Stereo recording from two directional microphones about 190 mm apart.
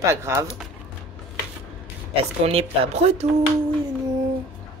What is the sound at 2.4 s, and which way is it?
Speech, 30° right (ahead or behind).